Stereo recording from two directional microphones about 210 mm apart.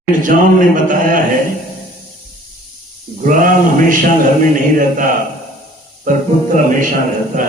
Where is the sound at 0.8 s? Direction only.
40° right (ahead or behind).